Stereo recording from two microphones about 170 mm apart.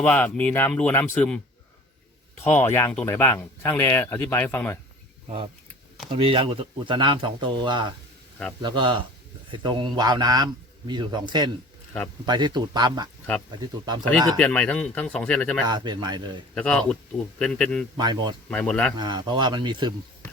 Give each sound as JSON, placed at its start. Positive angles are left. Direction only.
{"t": 0.0, "sound": "speech", "side_deg": 10}
{"t": 2.4, "sound": "speech", "side_deg": 10}
{"t": 6.1, "sound": "a man's voice", "side_deg": -30}
{"t": 14.1, "sound": "speech", "side_deg": 10}
{"t": 15.6, "sound": "a man's voice", "side_deg": -25}
{"t": 16.6, "sound": "speech", "side_deg": 5}
{"t": 17.9, "sound": "a man's voice", "side_deg": -25}
{"t": 18.4, "sound": "speech", "side_deg": 5}
{"t": 18.9, "sound": "a man's voice", "side_deg": -25}